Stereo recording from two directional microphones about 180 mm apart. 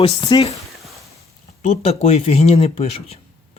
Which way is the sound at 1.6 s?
35° left (ahead or behind).